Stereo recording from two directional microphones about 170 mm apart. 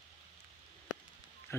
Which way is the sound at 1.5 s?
15° left (ahead or behind).